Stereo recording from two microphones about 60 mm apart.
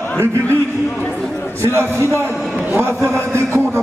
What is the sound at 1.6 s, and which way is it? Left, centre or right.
Speech, right.